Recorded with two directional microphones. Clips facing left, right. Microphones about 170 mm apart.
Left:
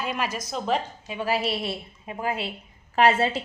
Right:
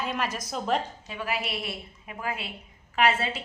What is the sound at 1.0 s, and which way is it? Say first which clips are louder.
Speech: left 5 dB; 20° left (ahead or behind).